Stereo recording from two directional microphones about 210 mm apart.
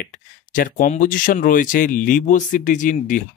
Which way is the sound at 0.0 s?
40° left (ahead or behind).